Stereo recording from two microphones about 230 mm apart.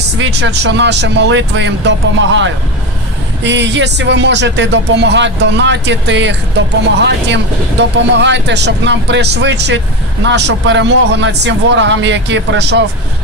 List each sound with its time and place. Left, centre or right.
0.2 s speech: right